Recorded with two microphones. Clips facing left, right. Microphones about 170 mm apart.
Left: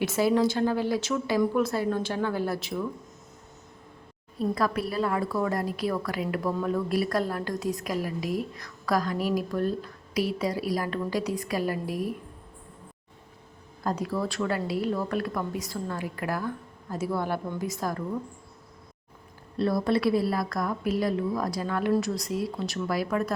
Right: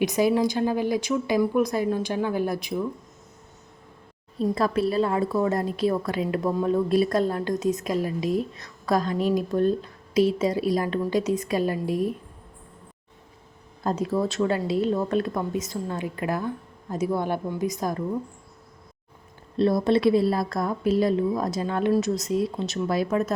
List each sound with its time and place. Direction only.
0.0 s speech: 15° right (ahead or behind)
4.5 s a woman's voice: 25° right (ahead or behind)
13.8 s a woman's voice: 25° right (ahead or behind)
19.5 s a woman's voice: 20° right (ahead or behind)